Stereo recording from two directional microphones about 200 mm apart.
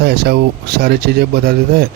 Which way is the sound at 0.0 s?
55° right (ahead or behind).